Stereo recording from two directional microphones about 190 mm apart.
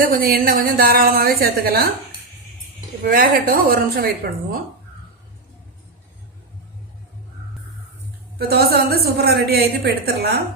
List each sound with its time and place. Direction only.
0.0 s a woman's voice: 50° right (ahead or behind)
3.1 s a woman's voice: 50° right (ahead or behind)
8.4 s a woman's voice: 55° right (ahead or behind)